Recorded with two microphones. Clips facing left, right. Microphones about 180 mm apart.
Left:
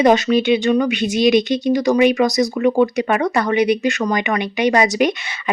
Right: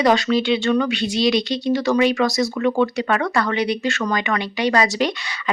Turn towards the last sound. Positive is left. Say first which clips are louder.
# left 3 dB
turn(degrees=20)  # may be behind; listen again after turning